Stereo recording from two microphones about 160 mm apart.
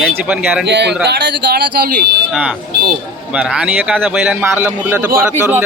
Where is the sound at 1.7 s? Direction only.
70° right (ahead or behind).